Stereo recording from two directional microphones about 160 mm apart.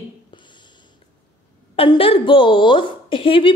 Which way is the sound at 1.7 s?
35° left (ahead or behind).